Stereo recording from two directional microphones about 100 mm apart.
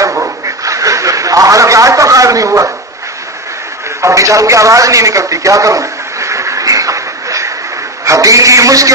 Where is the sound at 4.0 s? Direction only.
30° right (ahead or behind).